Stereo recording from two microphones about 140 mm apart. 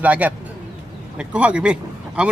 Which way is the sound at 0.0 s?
10° right (ahead or behind).